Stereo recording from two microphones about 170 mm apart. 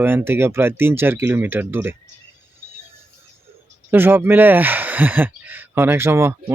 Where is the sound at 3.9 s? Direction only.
10° right (ahead or behind).